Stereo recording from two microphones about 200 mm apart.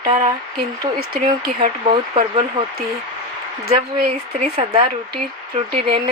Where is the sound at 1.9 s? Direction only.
25° right (ahead or behind).